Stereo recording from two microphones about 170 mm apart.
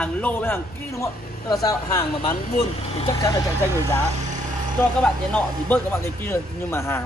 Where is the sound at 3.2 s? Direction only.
20° left (ahead or behind).